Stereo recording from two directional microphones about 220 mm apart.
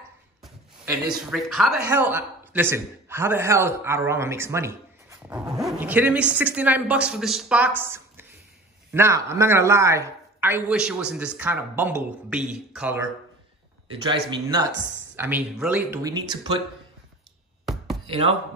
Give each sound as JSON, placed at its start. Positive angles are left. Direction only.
{"t": 0.8, "sound": "a man's voice", "side_deg": 0}
{"t": 14.0, "sound": "a man's voice", "side_deg": -20}
{"t": 18.0, "sound": "speech", "side_deg": -25}